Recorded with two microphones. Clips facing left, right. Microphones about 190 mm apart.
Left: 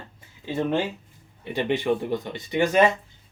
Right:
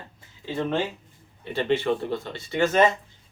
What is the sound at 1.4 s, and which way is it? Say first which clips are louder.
Speech: right 1 dB; 15° left (ahead or behind).